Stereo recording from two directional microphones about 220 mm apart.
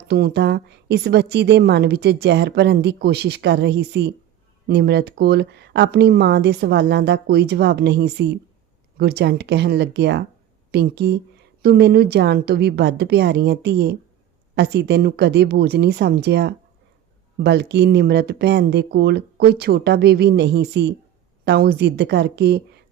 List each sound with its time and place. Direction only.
0.1 s a woman's voice: 45° right (ahead or behind)